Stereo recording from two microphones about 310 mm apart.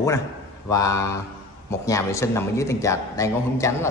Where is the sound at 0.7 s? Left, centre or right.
Centre.